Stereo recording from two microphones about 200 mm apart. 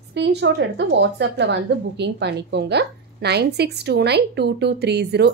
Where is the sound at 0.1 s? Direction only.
60° right (ahead or behind).